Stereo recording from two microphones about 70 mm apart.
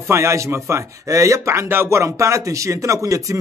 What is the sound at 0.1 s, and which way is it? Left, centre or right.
A man's voice, right.